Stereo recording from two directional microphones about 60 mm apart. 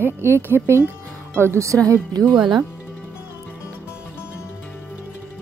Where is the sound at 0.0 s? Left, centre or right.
Right.